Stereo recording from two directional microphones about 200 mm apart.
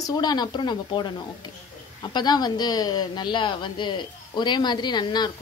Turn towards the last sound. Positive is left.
turn(degrees=20)  # may be behind; listen again after turning